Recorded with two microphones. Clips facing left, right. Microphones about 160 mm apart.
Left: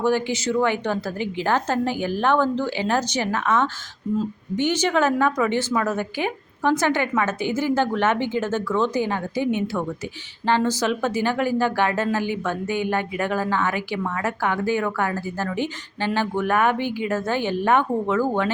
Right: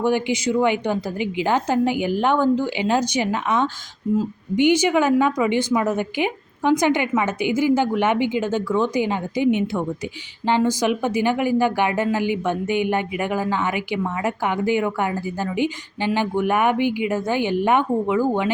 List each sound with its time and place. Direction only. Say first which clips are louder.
0.0 s speech: right 1 dB; 15° right (ahead or behind)